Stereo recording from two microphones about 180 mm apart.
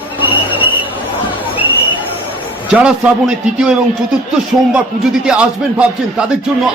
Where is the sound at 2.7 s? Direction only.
5° right (ahead or behind).